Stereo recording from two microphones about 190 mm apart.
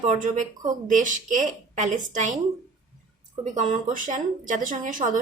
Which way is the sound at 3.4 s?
40° right (ahead or behind).